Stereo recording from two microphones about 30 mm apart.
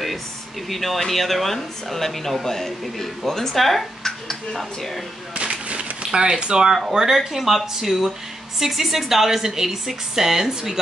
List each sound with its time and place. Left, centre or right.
0.7 s speech: centre
5.4 s a sound: right
6.1 s a woman's voice: right